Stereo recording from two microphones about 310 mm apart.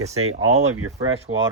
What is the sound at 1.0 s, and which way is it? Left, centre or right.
Speech, centre.